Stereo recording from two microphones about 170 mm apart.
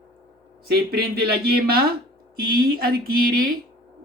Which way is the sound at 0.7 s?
65° right (ahead or behind).